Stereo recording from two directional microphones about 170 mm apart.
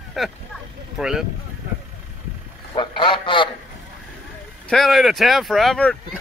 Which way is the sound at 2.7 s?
30° left (ahead or behind).